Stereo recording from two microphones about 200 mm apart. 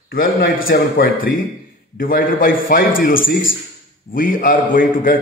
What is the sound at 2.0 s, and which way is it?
Speech, 45° left (ahead or behind).